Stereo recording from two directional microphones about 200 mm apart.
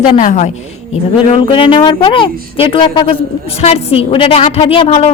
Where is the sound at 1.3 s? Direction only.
25° left (ahead or behind).